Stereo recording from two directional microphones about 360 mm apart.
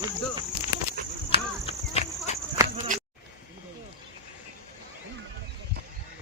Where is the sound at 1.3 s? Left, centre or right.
Centre.